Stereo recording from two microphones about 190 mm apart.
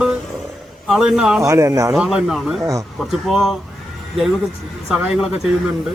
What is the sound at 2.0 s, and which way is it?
Speech, centre (ahead or behind).